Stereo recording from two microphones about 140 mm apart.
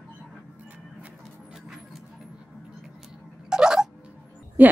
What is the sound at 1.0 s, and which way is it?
Music, 5° right (ahead or behind).